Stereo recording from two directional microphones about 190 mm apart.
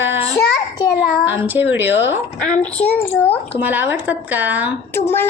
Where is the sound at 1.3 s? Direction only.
10° right (ahead or behind).